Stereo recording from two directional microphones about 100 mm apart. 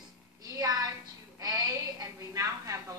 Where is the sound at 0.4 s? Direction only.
40° right (ahead or behind).